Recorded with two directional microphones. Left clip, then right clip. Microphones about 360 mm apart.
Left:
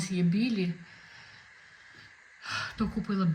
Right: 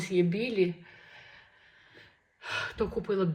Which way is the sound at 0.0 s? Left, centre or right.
Centre.